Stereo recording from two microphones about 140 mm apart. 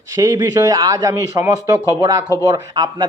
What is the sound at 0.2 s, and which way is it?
Speech, 25° right (ahead or behind).